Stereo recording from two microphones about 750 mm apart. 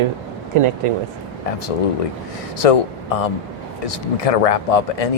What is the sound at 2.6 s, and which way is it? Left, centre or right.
Speech, left.